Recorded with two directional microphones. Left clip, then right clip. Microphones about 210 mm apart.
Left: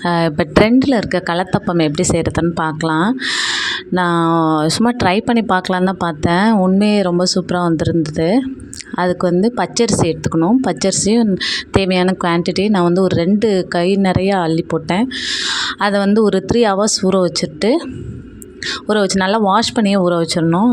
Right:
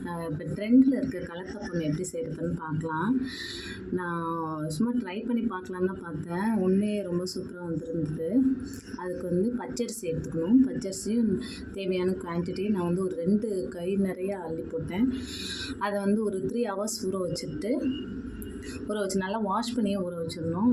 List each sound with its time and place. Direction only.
0.0 s a woman's voice: 45° left (ahead or behind)
18.9 s a woman's voice: 40° left (ahead or behind)